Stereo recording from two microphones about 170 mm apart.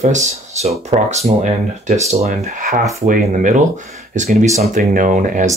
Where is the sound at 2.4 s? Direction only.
55° right (ahead or behind).